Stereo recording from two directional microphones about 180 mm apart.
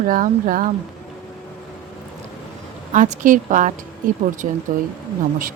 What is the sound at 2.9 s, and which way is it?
Speech, 45° right (ahead or behind).